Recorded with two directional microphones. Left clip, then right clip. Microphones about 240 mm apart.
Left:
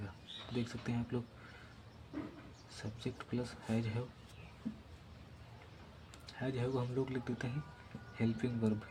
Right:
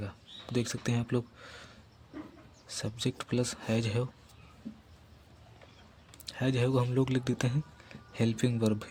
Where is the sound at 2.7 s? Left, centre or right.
Right.